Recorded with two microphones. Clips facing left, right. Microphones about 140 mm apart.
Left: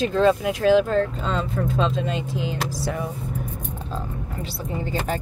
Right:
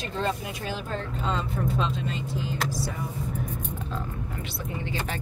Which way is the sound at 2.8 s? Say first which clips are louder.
Left 6 dB; 75° left (ahead or behind).